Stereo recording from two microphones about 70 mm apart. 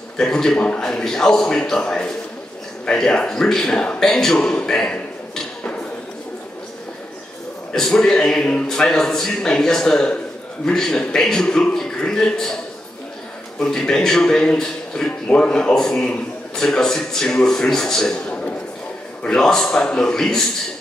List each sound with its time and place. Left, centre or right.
0.2 s a man's voice: centre
4.4 s a sound: centre
7.7 s a man's voice: centre
13.6 s a man's voice: centre
19.2 s a man's voice: centre